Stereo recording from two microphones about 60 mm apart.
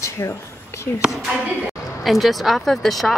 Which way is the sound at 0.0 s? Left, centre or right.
Left.